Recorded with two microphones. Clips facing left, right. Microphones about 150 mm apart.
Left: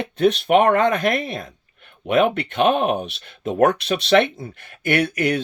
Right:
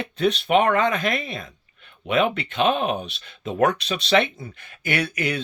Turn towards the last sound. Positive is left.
turn(degrees=55)  # may be behind; listen again after turning